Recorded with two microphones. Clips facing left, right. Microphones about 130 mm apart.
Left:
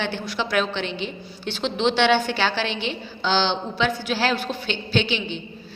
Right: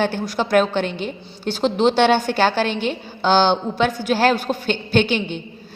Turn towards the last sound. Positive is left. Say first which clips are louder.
# right 5 dB
turn(degrees=-50)  # may be behind; listen again after turning